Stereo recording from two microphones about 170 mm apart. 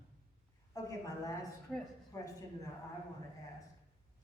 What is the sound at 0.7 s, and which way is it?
Speech, 20° left (ahead or behind).